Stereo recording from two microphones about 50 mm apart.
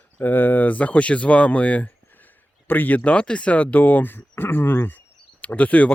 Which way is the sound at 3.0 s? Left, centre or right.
Left.